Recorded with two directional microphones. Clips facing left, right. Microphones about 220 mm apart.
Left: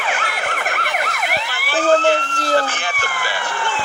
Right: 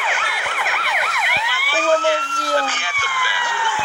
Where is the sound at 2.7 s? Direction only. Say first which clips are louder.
Left 4 dB; 45° left (ahead or behind).